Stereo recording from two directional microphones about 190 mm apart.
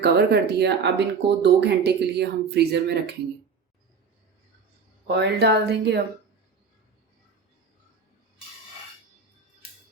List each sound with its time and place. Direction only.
0.0 s speech: 60° right (ahead or behind)
5.0 s speech: 60° right (ahead or behind)